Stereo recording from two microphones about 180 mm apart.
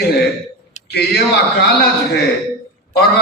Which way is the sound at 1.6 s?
60° left (ahead or behind).